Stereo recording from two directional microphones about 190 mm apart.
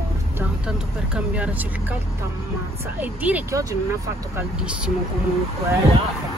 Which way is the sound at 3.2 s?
10° right (ahead or behind).